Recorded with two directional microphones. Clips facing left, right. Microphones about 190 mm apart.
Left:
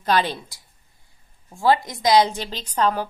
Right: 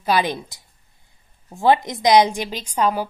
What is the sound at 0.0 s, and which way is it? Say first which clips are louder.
A woman's voice: right 1 dB; 10° right (ahead or behind).